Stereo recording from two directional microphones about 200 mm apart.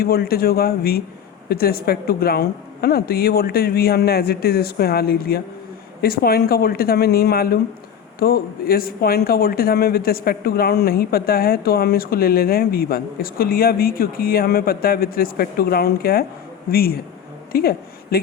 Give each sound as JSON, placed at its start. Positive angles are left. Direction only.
{"t": 0.0, "sound": "speech", "side_deg": 50}